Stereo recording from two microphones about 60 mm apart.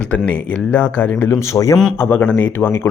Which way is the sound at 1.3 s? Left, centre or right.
Left.